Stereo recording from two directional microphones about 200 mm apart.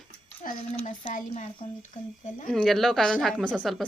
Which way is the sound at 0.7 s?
30° left (ahead or behind).